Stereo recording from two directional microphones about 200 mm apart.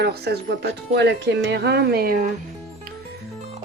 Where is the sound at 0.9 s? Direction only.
60° right (ahead or behind).